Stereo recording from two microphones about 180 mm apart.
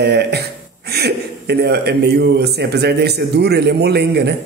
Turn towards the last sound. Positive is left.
turn(degrees=-65)  # may be behind; listen again after turning